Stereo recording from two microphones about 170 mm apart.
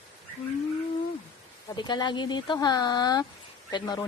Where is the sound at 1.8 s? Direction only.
25° left (ahead or behind).